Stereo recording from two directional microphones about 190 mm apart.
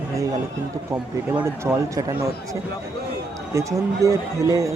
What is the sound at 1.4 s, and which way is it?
Speech, 15° right (ahead or behind).